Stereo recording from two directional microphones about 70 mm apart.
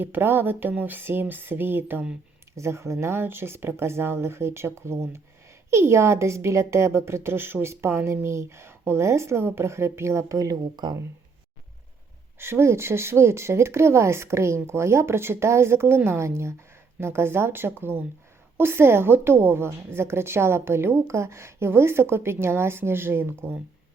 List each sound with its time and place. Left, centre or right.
0.0 s a woman's voice: right
2.6 s a woman's voice: right
12.4 s a woman's voice: right